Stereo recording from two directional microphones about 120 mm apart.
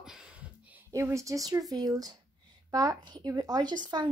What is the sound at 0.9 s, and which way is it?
Speech, 25° right (ahead or behind).